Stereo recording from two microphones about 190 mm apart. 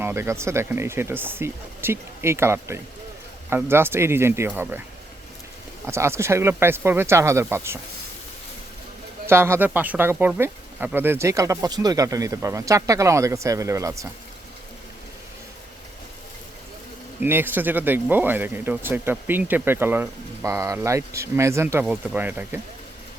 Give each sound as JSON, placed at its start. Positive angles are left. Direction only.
{"t": 0.0, "sound": "speech", "side_deg": -15}
{"t": 5.8, "sound": "speech", "side_deg": -15}
{"t": 9.2, "sound": "speech", "side_deg": -15}
{"t": 17.2, "sound": "speech", "side_deg": -10}